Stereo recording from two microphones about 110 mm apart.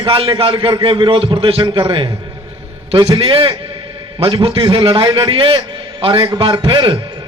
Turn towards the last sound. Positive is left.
turn(degrees=-50)  # may be behind; listen again after turning